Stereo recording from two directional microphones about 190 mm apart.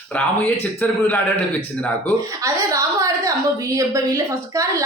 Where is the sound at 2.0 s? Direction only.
15° right (ahead or behind).